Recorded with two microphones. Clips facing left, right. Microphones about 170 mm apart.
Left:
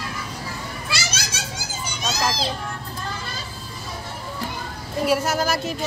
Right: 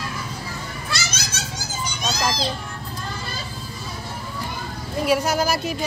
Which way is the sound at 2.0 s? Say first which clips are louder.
Even; 5° left (ahead or behind).